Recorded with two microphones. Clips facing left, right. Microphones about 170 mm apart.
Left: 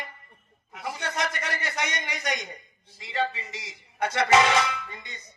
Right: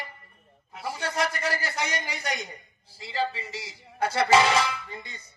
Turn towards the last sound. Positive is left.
turn(degrees=-30)  # may be behind; listen again after turning